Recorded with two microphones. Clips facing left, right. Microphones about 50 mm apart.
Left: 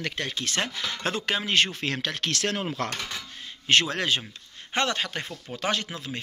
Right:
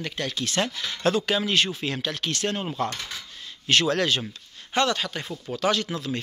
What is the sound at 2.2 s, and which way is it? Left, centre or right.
Speech, left.